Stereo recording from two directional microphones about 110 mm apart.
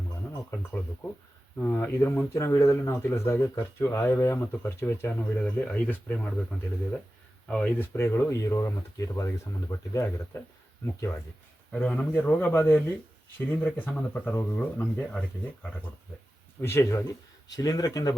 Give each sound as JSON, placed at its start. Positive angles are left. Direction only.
{"t": 0.5, "sound": "speech", "side_deg": 20}
{"t": 11.7, "sound": "speech", "side_deg": 10}
{"t": 16.6, "sound": "speech", "side_deg": 25}
{"t": 17.6, "sound": "speech", "side_deg": 35}